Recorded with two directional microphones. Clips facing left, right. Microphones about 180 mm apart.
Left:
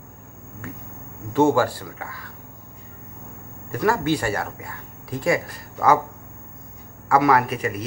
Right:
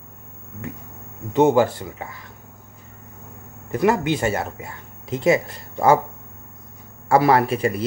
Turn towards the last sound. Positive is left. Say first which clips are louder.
# right 3 dB
turn(degrees=-30)  # may be behind; listen again after turning